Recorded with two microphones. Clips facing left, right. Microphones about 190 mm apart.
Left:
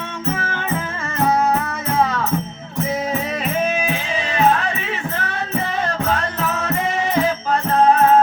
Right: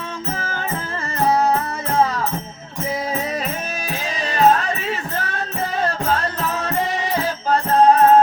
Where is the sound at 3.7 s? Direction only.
35° right (ahead or behind).